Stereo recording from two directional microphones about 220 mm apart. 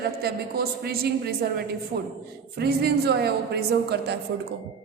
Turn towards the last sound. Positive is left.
turn(degrees=-50)  # may be behind; listen again after turning